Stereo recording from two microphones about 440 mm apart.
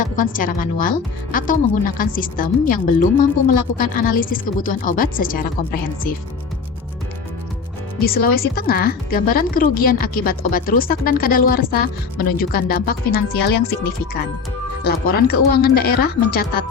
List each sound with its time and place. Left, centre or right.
0.0 s speech: centre
7.9 s speech: centre
14.8 s speech: left